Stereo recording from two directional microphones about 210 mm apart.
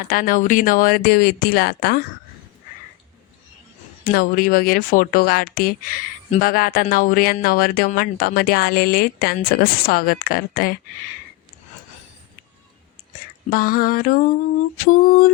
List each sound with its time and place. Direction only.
0.1 s speech: 40° left (ahead or behind)
4.0 s speech: 45° left (ahead or behind)
13.5 s speech: 45° left (ahead or behind)